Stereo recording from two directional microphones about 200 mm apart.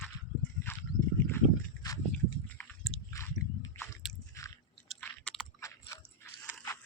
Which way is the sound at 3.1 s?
15° left (ahead or behind).